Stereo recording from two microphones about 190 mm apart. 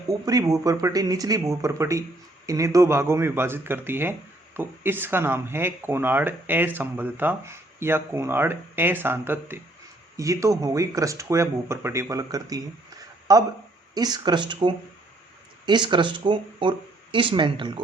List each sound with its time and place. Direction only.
0.1 s speech: 20° right (ahead or behind)